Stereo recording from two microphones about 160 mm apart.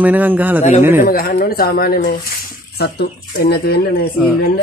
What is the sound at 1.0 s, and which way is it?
Speech, 65° left (ahead or behind).